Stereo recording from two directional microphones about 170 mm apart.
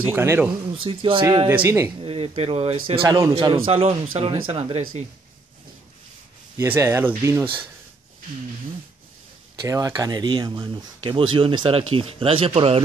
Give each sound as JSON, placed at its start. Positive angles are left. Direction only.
{"t": 0.1, "sound": "speech", "side_deg": -15}
{"t": 0.8, "sound": "speech", "side_deg": -30}
{"t": 1.5, "sound": "speech", "side_deg": -15}
{"t": 2.0, "sound": "speech", "side_deg": -35}
{"t": 3.0, "sound": "speech", "side_deg": -20}
{"t": 3.6, "sound": "speech", "side_deg": -35}
{"t": 6.6, "sound": "speech", "side_deg": -15}
{"t": 9.6, "sound": "speech", "side_deg": -20}